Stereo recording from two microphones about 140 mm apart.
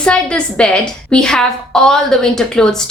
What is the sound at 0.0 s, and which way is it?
A woman's voice, 5° left (ahead or behind).